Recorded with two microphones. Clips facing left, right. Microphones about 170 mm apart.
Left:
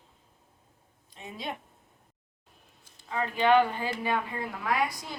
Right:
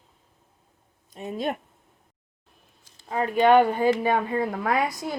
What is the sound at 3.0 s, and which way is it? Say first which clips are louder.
Speech: right 6 dB; 45° right (ahead or behind).